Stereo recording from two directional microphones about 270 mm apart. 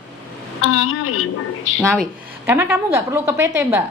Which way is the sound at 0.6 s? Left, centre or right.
Left.